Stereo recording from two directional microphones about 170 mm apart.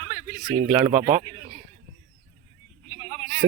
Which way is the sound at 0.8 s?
15° right (ahead or behind).